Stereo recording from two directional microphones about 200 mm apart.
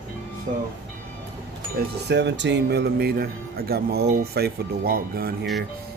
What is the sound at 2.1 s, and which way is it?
A man's voice, 60° right (ahead or behind).